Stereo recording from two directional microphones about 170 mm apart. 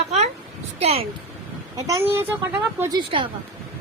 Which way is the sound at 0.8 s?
35° right (ahead or behind).